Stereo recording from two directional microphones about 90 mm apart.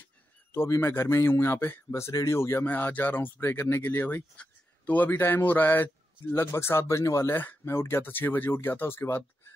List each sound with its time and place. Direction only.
0.5 s speech: 30° left (ahead or behind)